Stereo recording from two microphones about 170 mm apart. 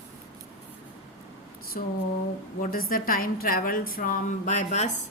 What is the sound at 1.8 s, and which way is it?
A woman's voice, 50° left (ahead or behind).